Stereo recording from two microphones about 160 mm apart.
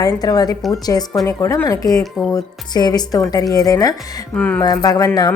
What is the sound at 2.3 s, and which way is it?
Speech, 25° left (ahead or behind).